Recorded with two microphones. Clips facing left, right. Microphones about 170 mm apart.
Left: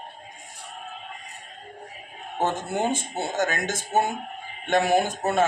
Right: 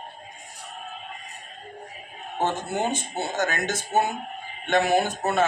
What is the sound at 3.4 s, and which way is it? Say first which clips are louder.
Speech: left 1 dB; 45° left (ahead or behind).